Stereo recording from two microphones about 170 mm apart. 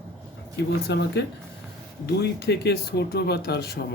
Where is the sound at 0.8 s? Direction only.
80° left.